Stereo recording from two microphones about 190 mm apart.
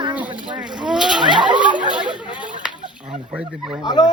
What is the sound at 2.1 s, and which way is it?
Chatter, 25° left (ahead or behind).